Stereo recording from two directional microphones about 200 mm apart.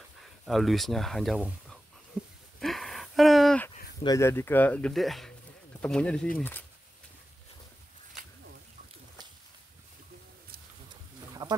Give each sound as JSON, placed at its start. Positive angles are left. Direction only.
{"t": 0.2, "sound": "speech", "side_deg": 0}
{"t": 2.6, "sound": "a sound", "side_deg": 0}
{"t": 4.0, "sound": "speech", "side_deg": 15}
{"t": 11.4, "sound": "duck", "side_deg": -25}